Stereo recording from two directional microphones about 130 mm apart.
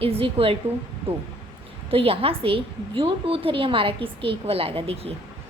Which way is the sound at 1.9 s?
45° right (ahead or behind).